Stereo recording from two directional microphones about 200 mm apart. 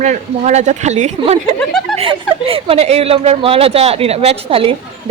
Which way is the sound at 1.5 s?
Centre (ahead or behind).